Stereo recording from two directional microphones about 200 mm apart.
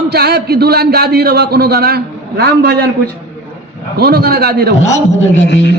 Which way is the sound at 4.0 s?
50° right (ahead or behind).